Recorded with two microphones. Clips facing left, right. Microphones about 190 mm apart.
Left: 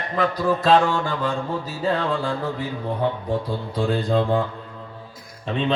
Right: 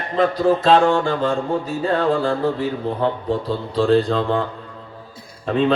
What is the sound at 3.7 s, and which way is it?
Speech, 75° right (ahead or behind).